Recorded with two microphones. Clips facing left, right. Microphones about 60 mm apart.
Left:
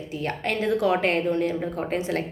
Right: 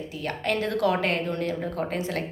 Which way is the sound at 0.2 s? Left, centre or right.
Left.